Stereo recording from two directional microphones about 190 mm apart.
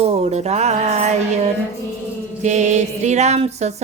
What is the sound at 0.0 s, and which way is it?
Music, 35° right (ahead or behind).